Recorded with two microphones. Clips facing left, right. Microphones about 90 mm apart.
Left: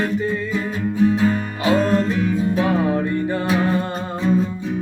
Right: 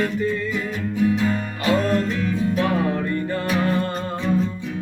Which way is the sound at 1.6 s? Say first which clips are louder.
Left 3 dB; 20° left (ahead or behind).